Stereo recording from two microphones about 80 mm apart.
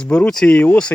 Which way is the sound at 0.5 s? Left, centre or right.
Centre.